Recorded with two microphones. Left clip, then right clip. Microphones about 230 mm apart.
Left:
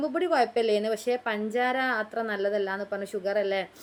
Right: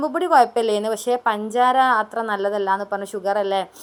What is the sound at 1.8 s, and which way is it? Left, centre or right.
A woman's voice, right.